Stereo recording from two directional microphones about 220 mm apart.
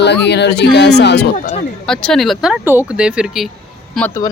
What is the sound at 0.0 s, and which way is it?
A man's voice, 50° left (ahead or behind).